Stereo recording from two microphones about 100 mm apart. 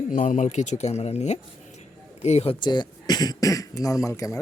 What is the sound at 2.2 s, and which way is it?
Speech, 85° left.